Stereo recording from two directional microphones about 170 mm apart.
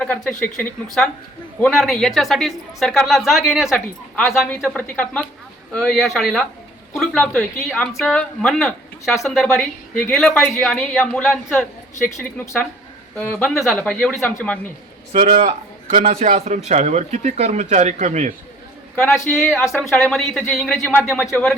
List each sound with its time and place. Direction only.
0.0 s speech: 5° left (ahead or behind)
13.1 s speech: 10° left (ahead or behind)
15.3 s a man's voice: 30° right (ahead or behind)
19.3 s speech: centre (ahead or behind)